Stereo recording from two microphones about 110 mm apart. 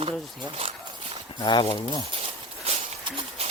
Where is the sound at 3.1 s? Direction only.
55° right (ahead or behind).